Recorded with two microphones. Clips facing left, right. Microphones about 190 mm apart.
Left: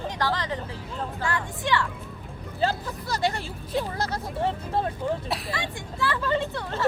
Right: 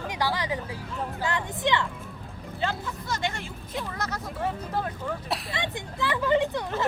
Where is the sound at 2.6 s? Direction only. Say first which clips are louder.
Left 4 dB; 35° left (ahead or behind).